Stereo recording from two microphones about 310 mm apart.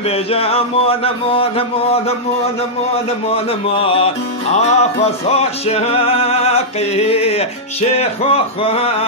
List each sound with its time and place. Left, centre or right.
0.1 s music: centre
3.3 s music: centre